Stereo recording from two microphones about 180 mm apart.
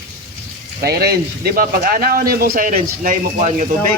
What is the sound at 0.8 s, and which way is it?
Speech, 60° right (ahead or behind).